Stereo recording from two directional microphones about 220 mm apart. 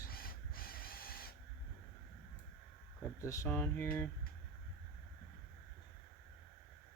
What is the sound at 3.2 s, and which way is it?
Speech, 15° left (ahead or behind).